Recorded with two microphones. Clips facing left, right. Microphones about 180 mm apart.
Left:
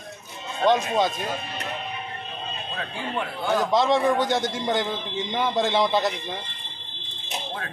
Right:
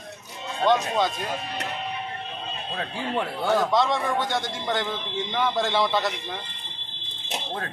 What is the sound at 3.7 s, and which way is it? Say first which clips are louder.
A man's voice: left 3 dB; 25° left (ahead or behind).